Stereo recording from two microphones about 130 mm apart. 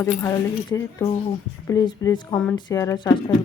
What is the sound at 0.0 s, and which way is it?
Speech, 20° left (ahead or behind).